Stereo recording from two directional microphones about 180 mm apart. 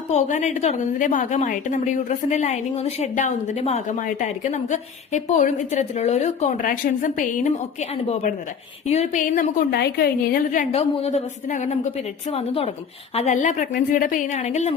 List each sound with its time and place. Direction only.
0.1 s a woman's voice: 40° left (ahead or behind)
9.7 s a woman's voice: 65° left (ahead or behind); by 14.7 s 40° left (ahead or behind)